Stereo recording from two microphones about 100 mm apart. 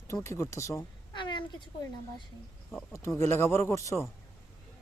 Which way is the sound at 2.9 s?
30° left (ahead or behind).